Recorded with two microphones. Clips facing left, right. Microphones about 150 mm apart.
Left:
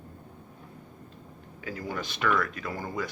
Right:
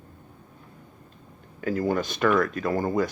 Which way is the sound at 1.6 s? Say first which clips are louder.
Right 10 dB; 50° right (ahead or behind).